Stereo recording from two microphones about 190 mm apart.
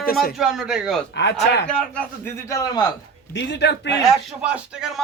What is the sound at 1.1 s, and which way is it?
Speech, 65° left (ahead or behind).